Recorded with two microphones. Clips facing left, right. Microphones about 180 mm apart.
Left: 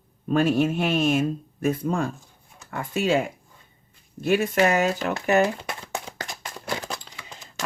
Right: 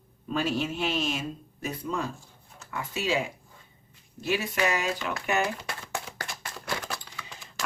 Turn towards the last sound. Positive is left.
turn(degrees=20)  # may be behind; listen again after turning